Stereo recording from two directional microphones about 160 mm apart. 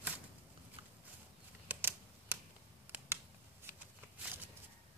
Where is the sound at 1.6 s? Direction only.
15° right (ahead or behind).